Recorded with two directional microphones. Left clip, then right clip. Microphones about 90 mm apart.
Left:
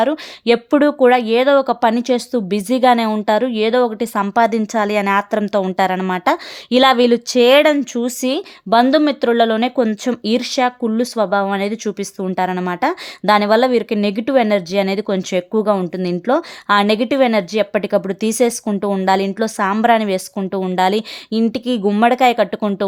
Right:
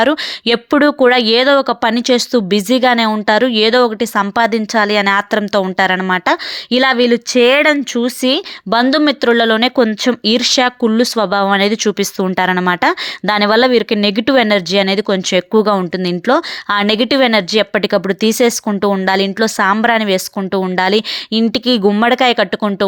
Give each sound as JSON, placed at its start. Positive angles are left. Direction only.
{"t": 0.0, "sound": "speech", "side_deg": -25}
{"t": 5.1, "sound": "speech", "side_deg": -15}
{"t": 6.7, "sound": "speech", "side_deg": -5}